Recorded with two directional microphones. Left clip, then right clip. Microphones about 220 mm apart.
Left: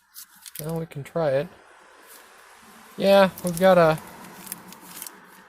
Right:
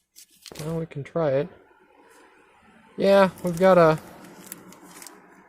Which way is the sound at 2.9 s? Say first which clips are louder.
Left 1 dB; 10° right (ahead or behind).